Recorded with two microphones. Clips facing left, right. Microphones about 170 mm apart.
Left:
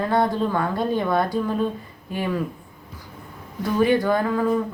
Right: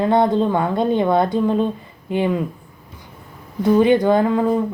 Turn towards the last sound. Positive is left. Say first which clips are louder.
# right 4 dB
turn(degrees=-25)  # may be behind; listen again after turning